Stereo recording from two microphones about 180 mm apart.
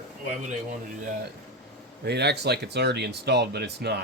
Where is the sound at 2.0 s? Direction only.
65° right (ahead or behind).